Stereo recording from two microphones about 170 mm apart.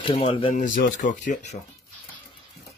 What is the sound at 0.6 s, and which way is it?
Speech, 55° left (ahead or behind).